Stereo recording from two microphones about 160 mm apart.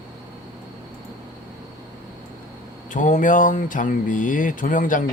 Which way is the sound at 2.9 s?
50° left (ahead or behind).